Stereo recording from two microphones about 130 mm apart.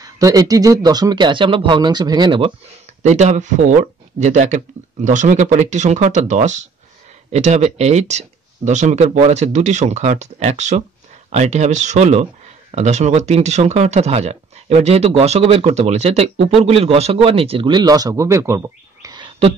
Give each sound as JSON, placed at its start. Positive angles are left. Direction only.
{"t": 0.0, "sound": "speech", "side_deg": -25}
{"t": 3.0, "sound": "speech", "side_deg": -60}